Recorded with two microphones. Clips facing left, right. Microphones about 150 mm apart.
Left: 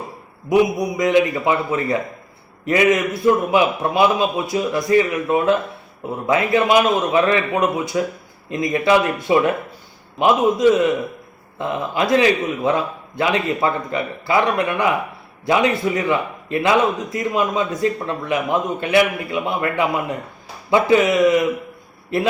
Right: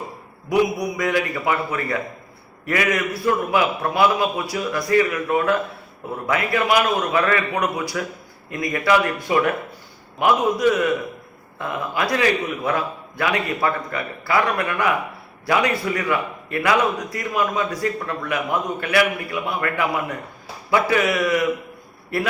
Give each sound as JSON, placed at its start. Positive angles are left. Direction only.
{"t": 0.5, "sound": "a man's voice", "side_deg": 20}